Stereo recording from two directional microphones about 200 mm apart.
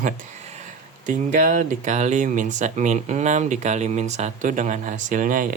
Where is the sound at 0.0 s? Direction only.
35° right (ahead or behind).